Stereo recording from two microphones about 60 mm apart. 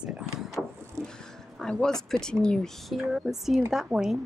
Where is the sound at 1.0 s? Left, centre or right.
Centre.